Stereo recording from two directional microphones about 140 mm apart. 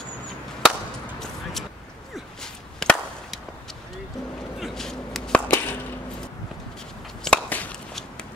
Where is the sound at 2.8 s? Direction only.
Centre (ahead or behind).